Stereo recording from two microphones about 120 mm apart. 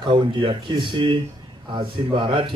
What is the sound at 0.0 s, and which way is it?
Speech, 45° right (ahead or behind).